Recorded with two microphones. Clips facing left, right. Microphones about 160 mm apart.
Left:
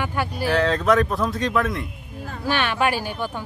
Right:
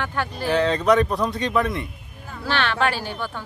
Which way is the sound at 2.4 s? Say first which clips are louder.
Left 1 dB; 10° left (ahead or behind).